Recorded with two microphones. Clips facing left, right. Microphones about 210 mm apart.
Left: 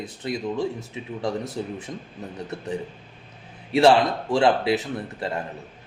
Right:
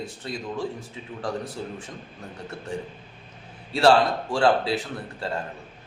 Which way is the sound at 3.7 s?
20° left (ahead or behind).